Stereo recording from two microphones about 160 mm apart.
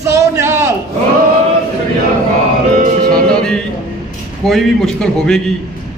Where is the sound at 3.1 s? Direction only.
5° left (ahead or behind).